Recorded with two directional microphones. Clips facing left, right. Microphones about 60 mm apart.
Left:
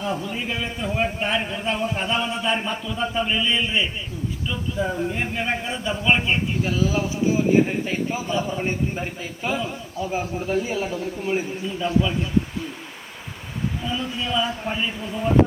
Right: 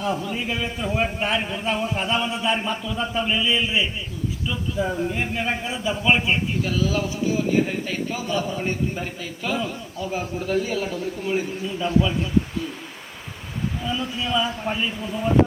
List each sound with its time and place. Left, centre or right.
0.0 s a man's voice: centre
6.7 s a man's voice: left
11.6 s a man's voice: centre
13.8 s a man's voice: centre